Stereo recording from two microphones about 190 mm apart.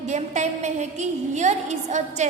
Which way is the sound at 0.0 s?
40° right (ahead or behind).